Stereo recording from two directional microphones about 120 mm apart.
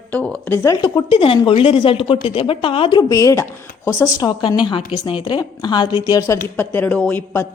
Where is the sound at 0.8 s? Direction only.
45° left (ahead or behind).